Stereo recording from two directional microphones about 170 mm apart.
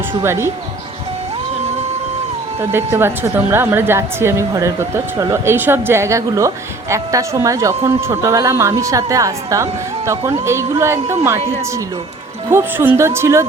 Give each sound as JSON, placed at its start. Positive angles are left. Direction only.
{"t": 0.2, "sound": "a woman's voice", "side_deg": -15}
{"t": 2.6, "sound": "a woman's voice", "side_deg": -15}
{"t": 12.5, "sound": "a woman's voice", "side_deg": -15}